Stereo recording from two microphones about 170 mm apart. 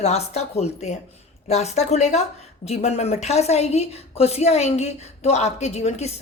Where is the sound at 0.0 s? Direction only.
40° left (ahead or behind).